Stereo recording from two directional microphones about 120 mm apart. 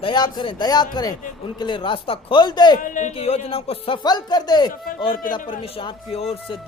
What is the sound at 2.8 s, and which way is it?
Speech, 90° left.